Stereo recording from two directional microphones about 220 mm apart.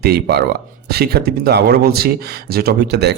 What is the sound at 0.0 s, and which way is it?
Speech, 45° right (ahead or behind).